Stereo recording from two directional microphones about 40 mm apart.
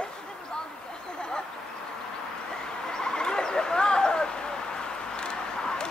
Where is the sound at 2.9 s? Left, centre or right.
Centre.